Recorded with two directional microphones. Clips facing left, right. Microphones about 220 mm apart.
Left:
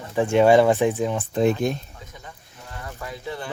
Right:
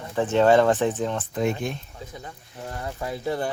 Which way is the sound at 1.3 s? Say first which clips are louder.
Left 7 dB; 35° left (ahead or behind).